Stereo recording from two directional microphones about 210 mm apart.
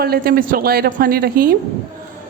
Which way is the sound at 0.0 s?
45° right (ahead or behind).